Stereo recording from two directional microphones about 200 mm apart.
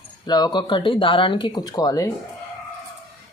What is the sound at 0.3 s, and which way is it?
Speech, 20° left (ahead or behind).